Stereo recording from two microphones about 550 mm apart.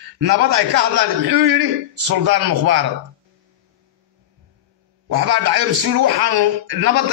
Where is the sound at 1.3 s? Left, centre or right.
Right.